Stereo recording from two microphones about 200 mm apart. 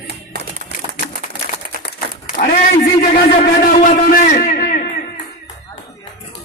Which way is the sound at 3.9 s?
40° left (ahead or behind).